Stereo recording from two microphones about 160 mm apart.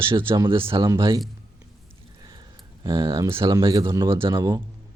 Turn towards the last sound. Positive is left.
turn(degrees=-30)  # may be behind; listen again after turning